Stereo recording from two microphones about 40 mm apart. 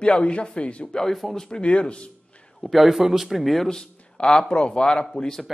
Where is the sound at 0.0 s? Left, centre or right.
Left.